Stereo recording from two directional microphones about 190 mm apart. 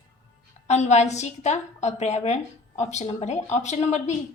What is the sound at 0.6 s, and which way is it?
A woman's voice, 35° left (ahead or behind).